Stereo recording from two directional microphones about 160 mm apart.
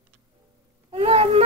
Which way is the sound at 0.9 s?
35° right (ahead or behind).